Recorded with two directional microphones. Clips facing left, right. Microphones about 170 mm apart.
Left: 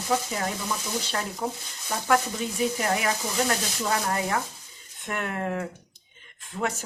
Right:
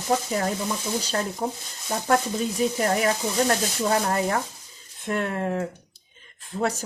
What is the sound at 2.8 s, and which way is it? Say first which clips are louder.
Speech: right 4 dB; 35° right (ahead or behind).